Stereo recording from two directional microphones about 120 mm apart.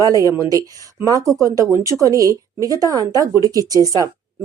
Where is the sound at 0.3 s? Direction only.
30° right (ahead or behind).